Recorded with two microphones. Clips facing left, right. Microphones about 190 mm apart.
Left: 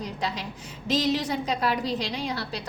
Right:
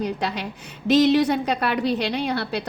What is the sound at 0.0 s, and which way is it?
A woman's voice, 65° right (ahead or behind).